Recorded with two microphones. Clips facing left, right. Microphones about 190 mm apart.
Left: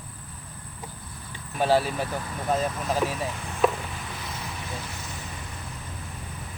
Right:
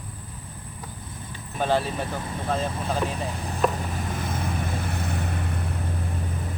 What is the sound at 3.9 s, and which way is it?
Vehicle, 50° right (ahead or behind).